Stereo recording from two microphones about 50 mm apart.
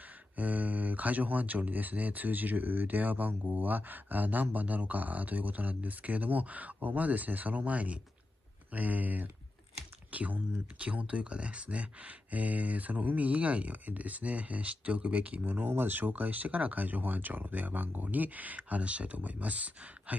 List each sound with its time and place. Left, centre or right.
0.4 s speech: right